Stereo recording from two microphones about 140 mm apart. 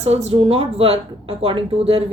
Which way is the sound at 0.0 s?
50° right (ahead or behind).